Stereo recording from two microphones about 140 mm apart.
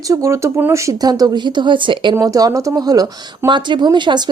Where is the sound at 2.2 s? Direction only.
25° right (ahead or behind).